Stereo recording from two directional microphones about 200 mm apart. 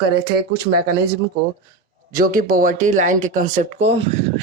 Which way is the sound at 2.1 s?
45° right (ahead or behind).